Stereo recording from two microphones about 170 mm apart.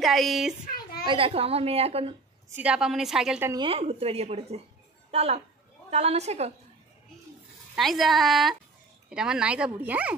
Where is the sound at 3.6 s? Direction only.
35° right (ahead or behind).